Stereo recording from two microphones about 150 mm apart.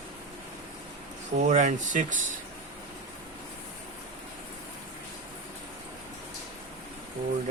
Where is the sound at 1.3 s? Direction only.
55° right (ahead or behind).